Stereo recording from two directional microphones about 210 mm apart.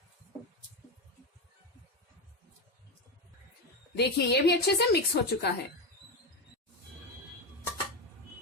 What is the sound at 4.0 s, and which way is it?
A woman's voice, 50° left (ahead or behind).